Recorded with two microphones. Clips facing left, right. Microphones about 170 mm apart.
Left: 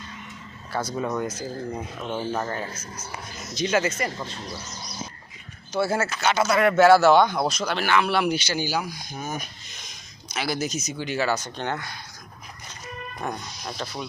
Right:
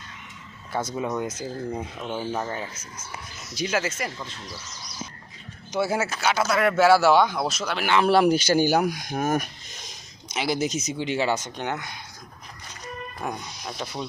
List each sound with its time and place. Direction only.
0.7 s speech: 20° right (ahead or behind)
5.7 s speech: 15° right (ahead or behind)
8.0 s a man's voice: 40° right (ahead or behind)
8.9 s speech: 75° right (ahead or behind)
10.3 s speech: 20° right (ahead or behind)
13.1 s speech: 5° right (ahead or behind)